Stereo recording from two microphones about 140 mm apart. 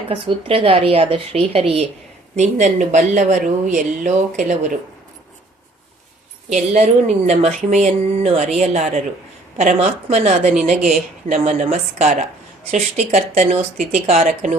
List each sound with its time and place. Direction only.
0.1 s a woman's voice: 45° right (ahead or behind)
2.3 s speech: 55° right (ahead or behind)
6.5 s a woman's voice: 55° right (ahead or behind)